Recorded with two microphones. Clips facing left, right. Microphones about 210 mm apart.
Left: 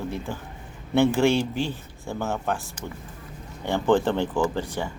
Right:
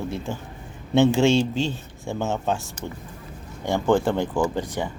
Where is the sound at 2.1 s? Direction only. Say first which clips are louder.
Right 2 dB; 25° right (ahead or behind).